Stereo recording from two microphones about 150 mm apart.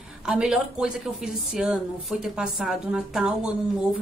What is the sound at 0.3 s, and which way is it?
A woman's voice, 5° right (ahead or behind).